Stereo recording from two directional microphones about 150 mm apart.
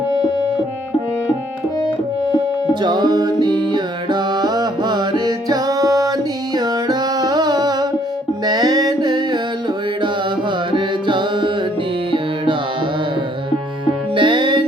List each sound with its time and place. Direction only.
2.8 s music: 25° right (ahead or behind)
14.2 s music: 30° right (ahead or behind)